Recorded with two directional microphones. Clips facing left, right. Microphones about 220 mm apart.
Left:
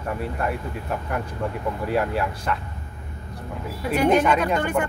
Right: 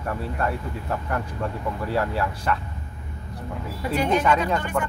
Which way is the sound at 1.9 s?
20° left (ahead or behind).